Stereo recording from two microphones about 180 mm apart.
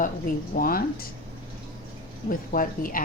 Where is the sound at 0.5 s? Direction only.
55° left (ahead or behind).